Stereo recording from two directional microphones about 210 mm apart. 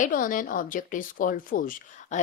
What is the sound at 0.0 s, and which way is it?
Speech, 40° left (ahead or behind).